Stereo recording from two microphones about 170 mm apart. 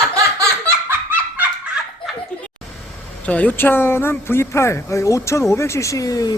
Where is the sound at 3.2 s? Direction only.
10° left (ahead or behind).